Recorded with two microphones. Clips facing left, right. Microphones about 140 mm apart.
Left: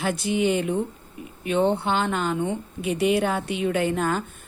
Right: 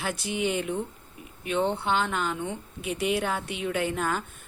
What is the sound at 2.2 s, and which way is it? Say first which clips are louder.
Speech: left 5 dB; 40° left (ahead or behind).